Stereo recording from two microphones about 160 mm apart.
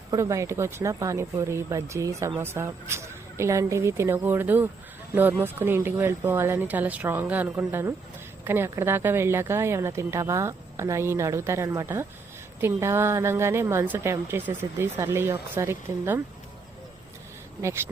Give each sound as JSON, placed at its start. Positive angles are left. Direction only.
{"t": 0.1, "sound": "a woman's voice", "side_deg": -20}
{"t": 17.6, "sound": "a woman's voice", "side_deg": -15}